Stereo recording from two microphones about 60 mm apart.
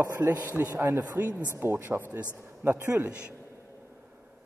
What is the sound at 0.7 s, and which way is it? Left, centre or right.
Speech, right.